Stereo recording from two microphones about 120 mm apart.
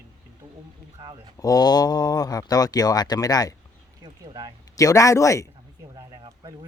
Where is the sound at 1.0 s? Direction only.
35° right (ahead or behind).